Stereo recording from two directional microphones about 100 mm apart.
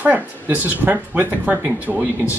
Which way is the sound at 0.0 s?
15° right (ahead or behind).